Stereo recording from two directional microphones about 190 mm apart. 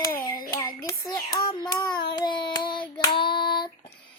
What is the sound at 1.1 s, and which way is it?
Speech, 20° left (ahead or behind).